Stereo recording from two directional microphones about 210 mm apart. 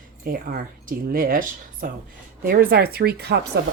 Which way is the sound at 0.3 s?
45° right (ahead or behind).